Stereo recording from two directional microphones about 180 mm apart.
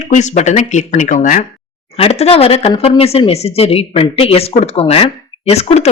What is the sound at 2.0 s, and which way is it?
Speech, 35° left (ahead or behind).